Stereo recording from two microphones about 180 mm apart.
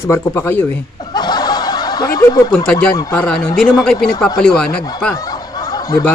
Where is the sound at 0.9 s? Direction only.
25° left (ahead or behind).